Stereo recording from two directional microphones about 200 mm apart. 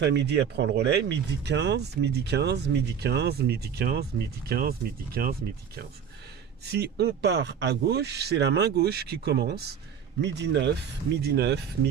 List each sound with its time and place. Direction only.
0.0 s speech: 60° right (ahead or behind)